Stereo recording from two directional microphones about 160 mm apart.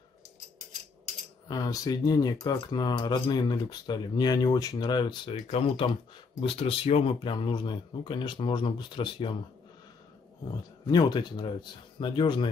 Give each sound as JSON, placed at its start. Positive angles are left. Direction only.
{"t": 1.5, "sound": "speech", "side_deg": 25}
{"t": 5.3, "sound": "speech", "side_deg": 40}
{"t": 10.9, "sound": "speech", "side_deg": 25}